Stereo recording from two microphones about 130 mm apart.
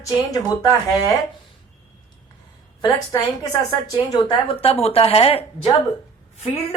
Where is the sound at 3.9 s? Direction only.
40° left (ahead or behind).